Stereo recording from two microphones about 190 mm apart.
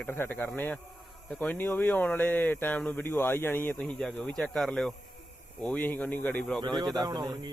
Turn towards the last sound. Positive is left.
turn(degrees=-20)  # may be behind; listen again after turning